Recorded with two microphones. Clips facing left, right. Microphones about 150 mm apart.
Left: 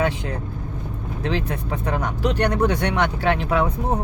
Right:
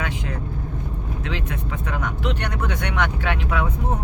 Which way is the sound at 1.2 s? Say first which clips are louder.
Left 6 dB; 35° left (ahead or behind).